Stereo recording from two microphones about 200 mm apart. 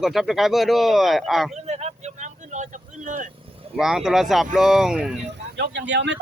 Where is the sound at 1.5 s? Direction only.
35° right (ahead or behind).